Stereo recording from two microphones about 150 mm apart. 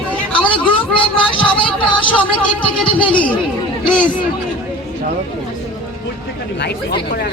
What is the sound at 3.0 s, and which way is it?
Speech, 10° left (ahead or behind).